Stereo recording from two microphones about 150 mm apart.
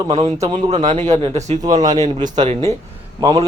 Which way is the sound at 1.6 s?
25° right (ahead or behind).